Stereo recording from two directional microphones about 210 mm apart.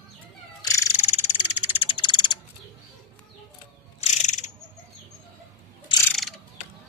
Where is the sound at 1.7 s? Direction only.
25° left (ahead or behind).